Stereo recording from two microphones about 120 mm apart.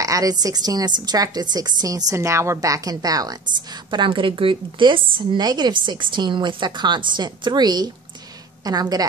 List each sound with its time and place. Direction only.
0.0 s a woman's voice: 30° right (ahead or behind)